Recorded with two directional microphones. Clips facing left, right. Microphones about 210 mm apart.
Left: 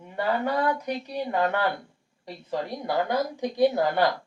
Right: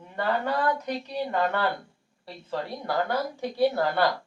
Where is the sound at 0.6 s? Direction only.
10° left (ahead or behind).